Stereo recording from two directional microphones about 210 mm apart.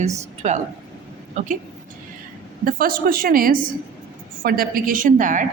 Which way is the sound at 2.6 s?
45° right (ahead or behind).